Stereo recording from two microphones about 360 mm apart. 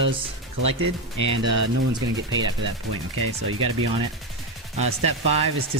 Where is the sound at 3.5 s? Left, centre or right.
Right.